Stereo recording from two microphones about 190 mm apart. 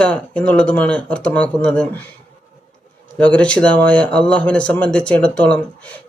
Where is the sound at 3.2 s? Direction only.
5° left (ahead or behind).